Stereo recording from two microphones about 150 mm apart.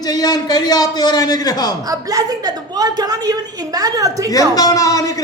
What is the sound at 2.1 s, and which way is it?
A woman's voice, 25° right (ahead or behind).